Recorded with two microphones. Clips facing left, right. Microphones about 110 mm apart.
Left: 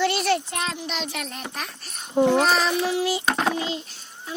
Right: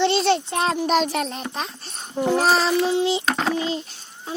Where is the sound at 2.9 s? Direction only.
25° right (ahead or behind).